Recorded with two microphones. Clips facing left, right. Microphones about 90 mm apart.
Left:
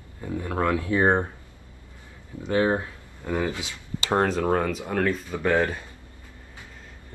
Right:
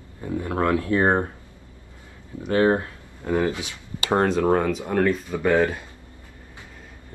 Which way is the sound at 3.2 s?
15° right (ahead or behind).